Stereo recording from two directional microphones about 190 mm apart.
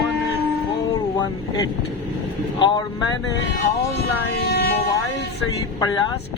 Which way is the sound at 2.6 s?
25° left (ahead or behind).